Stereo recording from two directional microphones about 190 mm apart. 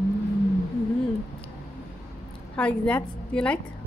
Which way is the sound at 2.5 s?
5° left (ahead or behind).